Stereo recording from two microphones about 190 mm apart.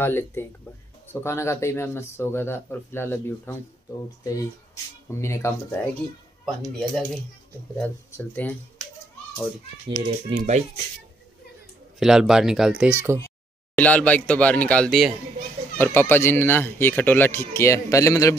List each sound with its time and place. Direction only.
0.0 s speech: 10° left (ahead or behind)
7.7 s speech: 10° left (ahead or behind)
9.8 s a child's voice: 25° right (ahead or behind)
10.3 s speech: 40° right (ahead or behind)
12.0 s speech: 5° right (ahead or behind)
13.7 s speech: 10° left (ahead or behind)
15.8 s speech: 10° left (ahead or behind)